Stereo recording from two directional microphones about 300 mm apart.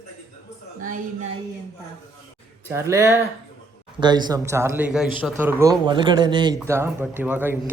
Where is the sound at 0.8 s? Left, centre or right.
Right.